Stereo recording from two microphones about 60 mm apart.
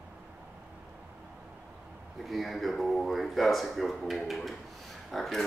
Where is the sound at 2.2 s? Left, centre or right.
Centre.